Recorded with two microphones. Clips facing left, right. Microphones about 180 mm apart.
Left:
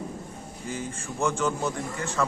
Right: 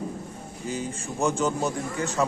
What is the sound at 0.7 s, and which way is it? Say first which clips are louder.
Speech: right 2 dB; 15° right (ahead or behind).